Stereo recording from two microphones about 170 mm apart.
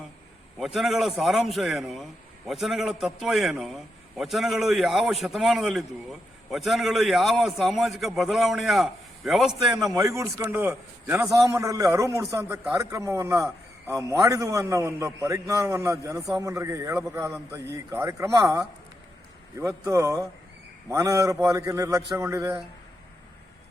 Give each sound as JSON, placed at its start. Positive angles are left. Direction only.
{"t": 0.6, "sound": "a man's voice", "side_deg": 0}
{"t": 9.9, "sound": "a man's voice", "side_deg": -20}